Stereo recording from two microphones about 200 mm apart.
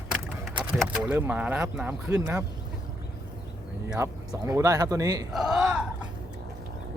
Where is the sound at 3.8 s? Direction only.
15° right (ahead or behind).